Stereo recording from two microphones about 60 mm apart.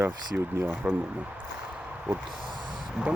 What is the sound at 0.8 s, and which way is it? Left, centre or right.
Speech, right.